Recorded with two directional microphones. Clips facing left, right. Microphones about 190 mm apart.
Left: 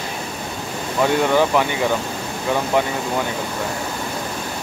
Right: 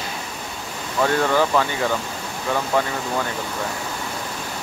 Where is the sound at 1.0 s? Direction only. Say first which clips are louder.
Left 2 dB; 15° left (ahead or behind).